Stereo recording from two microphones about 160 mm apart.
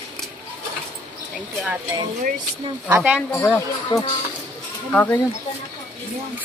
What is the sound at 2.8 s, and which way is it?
Speech, 10° right (ahead or behind).